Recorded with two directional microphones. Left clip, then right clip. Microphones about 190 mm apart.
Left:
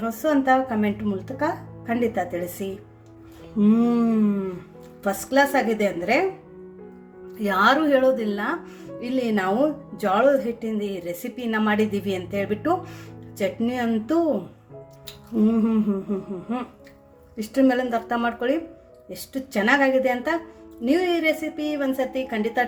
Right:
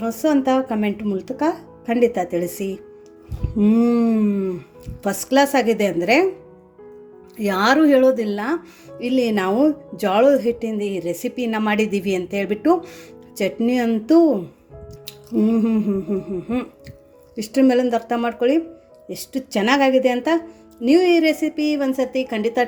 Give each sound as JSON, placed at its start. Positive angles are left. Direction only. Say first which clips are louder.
{"t": 0.0, "sound": "a woman's voice", "louder": "right 3 dB", "side_deg": -30}
{"t": 3.6, "sound": "a sound", "louder": "right 3 dB", "side_deg": -25}
{"t": 5.0, "sound": "a woman's voice", "louder": "right 3 dB", "side_deg": -35}
{"t": 7.3, "sound": "a woman's voice", "louder": "right 2 dB", "side_deg": -35}
{"t": 15.0, "sound": "music", "louder": "right 3 dB", "side_deg": -25}
{"t": 17.3, "sound": "a woman's voice", "louder": "right 4 dB", "side_deg": -30}